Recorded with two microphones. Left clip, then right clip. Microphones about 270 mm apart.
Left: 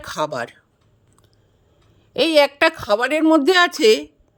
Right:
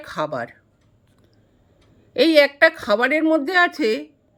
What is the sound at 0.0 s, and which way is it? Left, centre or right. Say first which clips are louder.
Speech: left 2 dB; left.